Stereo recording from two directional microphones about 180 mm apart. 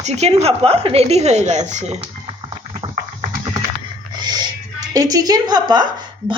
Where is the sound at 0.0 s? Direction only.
35° right (ahead or behind).